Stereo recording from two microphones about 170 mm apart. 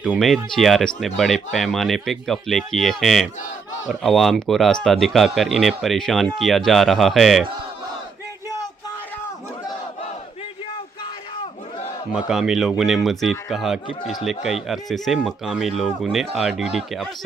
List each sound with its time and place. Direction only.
0.0 s speech: centre (ahead or behind)
12.1 s speech: centre (ahead or behind)